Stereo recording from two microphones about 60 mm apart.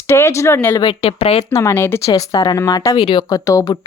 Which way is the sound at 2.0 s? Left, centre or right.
Left.